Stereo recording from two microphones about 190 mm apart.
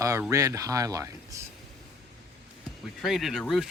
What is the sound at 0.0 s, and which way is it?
Speech, 15° right (ahead or behind).